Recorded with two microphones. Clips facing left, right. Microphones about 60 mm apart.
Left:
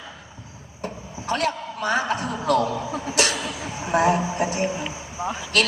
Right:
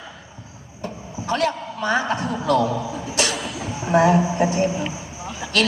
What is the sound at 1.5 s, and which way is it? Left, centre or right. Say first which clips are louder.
Speech: right 1 dB; right.